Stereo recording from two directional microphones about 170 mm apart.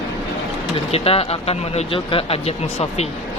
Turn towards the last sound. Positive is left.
turn(degrees=35)  # may be behind; listen again after turning